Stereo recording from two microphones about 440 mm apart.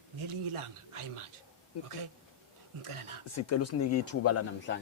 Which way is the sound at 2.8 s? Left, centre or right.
Right.